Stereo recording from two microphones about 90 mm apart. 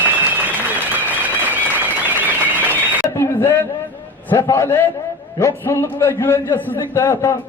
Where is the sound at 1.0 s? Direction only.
20° right (ahead or behind).